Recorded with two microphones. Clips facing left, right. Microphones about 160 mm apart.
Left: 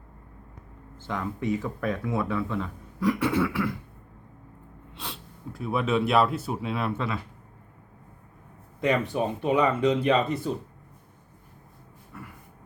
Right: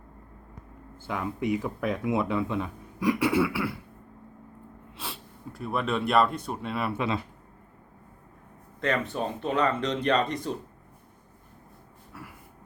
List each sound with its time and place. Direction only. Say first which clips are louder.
0.9 s speech: even; 10° right (ahead or behind)
4.9 s speech: even; centre (ahead or behind)
6.9 s speech: right 2 dB; 15° right (ahead or behind)
8.8 s speech: left 3 dB; 10° left (ahead or behind)
12.1 s a sound: left 1 dB; 5° right (ahead or behind)